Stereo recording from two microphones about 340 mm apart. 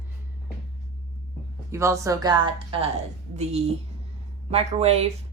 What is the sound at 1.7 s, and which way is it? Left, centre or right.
Speech, centre.